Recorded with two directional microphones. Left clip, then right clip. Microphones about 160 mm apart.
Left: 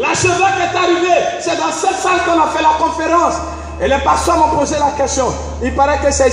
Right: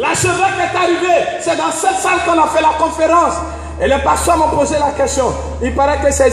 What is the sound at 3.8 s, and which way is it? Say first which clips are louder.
Speech: even; 55° right (ahead or behind).